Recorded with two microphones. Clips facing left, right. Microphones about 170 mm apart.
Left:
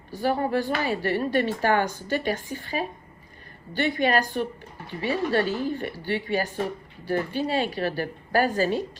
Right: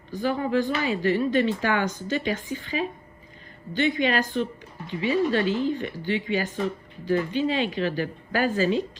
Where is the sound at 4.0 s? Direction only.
45° left (ahead or behind).